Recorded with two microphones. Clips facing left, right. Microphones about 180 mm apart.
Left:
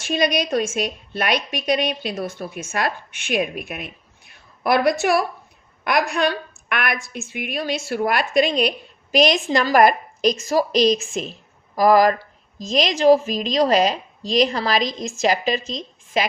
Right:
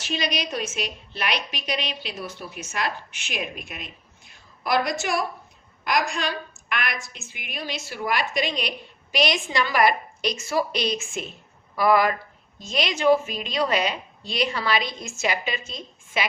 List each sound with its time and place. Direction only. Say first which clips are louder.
0.0 s a woman's voice: left 7 dB; 50° left (ahead or behind)